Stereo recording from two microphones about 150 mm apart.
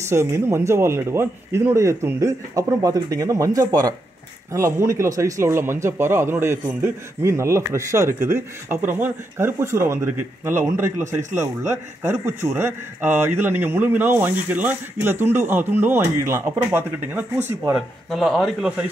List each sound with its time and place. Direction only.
0.0 s speech: 20° right (ahead or behind)
18.1 s speech: centre (ahead or behind)